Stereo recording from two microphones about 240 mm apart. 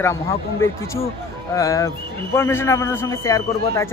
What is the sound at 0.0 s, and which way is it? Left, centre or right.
A man's voice, centre.